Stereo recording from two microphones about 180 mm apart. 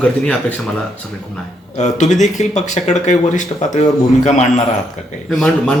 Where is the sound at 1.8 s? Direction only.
40° left (ahead or behind).